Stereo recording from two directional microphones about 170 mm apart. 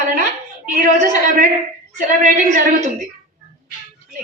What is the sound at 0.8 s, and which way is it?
A woman's voice, 50° right (ahead or behind).